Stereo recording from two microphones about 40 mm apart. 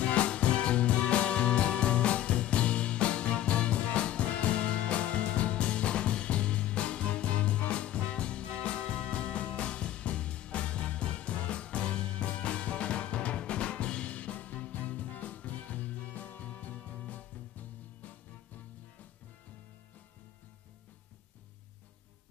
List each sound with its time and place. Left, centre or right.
0.0 s music: left